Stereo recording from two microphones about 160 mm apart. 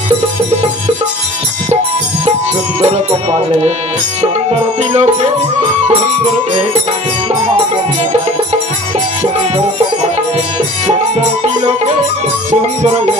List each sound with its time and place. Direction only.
2.8 s music: 40° right (ahead or behind)
10.9 s music: 45° right (ahead or behind)